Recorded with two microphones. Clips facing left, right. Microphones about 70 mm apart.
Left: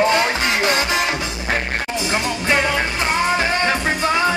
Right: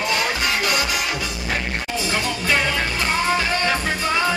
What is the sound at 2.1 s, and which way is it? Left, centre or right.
Music, left.